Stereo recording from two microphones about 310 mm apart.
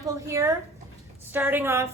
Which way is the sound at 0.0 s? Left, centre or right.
Centre.